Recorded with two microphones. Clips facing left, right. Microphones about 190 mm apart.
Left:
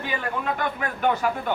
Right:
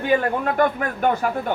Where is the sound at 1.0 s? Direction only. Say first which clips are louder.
Right 2 dB; 45° right (ahead or behind).